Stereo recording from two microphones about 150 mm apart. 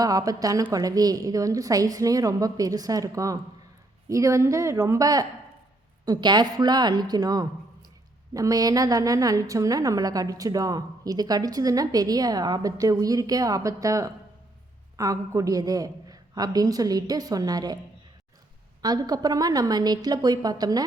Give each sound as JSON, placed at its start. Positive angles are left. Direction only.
{"t": 0.0, "sound": "a woman's voice", "side_deg": -25}
{"t": 18.8, "sound": "a woman's voice", "side_deg": -25}